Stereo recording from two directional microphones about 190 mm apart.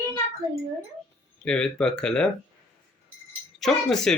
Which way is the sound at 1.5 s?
5° left (ahead or behind).